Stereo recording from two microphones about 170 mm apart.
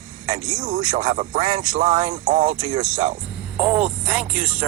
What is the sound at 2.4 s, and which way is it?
Speech, 30° right (ahead or behind).